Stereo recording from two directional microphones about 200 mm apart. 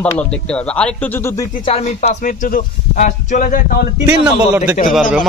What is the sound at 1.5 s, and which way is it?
Speech, 35° left (ahead or behind).